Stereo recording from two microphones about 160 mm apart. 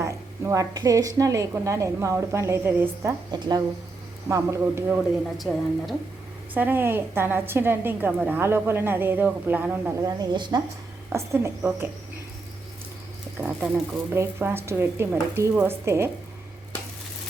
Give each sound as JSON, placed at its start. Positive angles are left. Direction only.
{"t": 0.0, "sound": "a woman's voice", "side_deg": -20}
{"t": 5.5, "sound": "a woman's voice", "side_deg": -5}
{"t": 10.1, "sound": "a woman's voice", "side_deg": -25}
{"t": 11.1, "sound": "a woman's voice", "side_deg": -15}
{"t": 13.4, "sound": "a woman's voice", "side_deg": -10}